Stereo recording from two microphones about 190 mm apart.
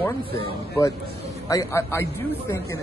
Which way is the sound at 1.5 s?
15° left (ahead or behind).